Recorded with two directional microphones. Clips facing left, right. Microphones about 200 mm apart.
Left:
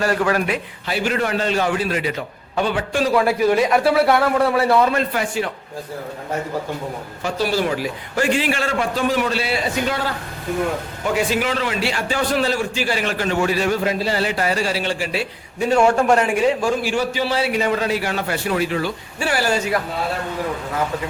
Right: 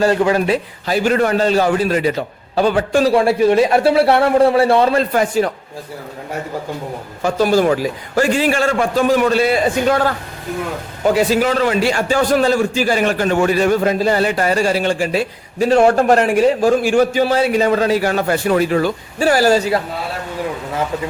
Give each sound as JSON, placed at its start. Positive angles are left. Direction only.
{"t": 0.0, "sound": "a man's voice", "side_deg": -25}
{"t": 7.3, "sound": "a man's voice", "side_deg": -45}
{"t": 16.1, "sound": "a man's voice", "side_deg": -50}